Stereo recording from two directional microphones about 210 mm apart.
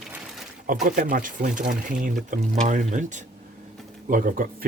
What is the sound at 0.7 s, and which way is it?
Speech, 40° right (ahead or behind).